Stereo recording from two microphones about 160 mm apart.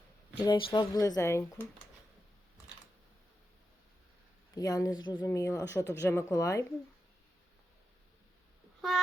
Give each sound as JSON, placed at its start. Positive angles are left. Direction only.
{"t": 0.4, "sound": "speech", "side_deg": 30}
{"t": 4.5, "sound": "a woman's voice", "side_deg": 20}
{"t": 8.8, "sound": "a sound", "side_deg": 0}